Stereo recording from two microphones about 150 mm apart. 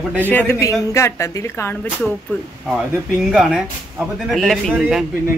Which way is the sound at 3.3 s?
Centre (ahead or behind).